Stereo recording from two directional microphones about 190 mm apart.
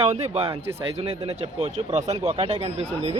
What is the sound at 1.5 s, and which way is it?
Speech, 35° right (ahead or behind).